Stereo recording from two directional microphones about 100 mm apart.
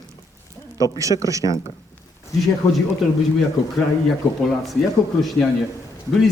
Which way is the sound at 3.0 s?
Centre (ahead or behind).